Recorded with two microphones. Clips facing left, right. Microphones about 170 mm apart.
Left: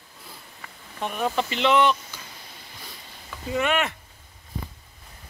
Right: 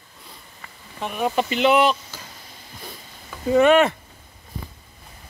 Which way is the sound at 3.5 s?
35° right (ahead or behind).